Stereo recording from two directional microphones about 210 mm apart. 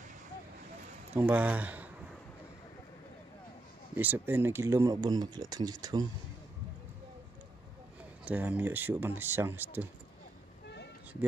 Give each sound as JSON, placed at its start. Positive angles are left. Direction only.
{"t": 1.1, "sound": "speech", "side_deg": -5}
{"t": 3.9, "sound": "speech", "side_deg": -10}
{"t": 8.3, "sound": "speech", "side_deg": -5}